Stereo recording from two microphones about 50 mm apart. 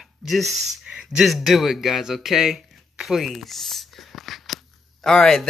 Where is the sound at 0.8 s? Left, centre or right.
Centre.